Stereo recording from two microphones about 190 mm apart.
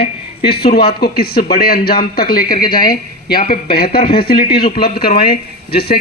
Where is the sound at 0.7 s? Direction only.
55° left (ahead or behind).